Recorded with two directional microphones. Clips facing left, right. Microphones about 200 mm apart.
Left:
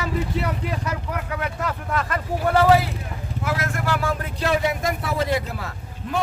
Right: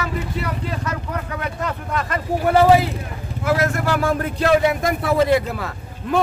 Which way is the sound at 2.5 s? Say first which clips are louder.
Right 3 dB; 20° right (ahead or behind).